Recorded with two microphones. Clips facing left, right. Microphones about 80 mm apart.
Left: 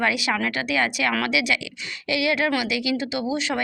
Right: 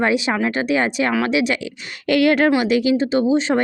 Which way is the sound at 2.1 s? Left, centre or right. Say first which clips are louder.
Right 8 dB; right.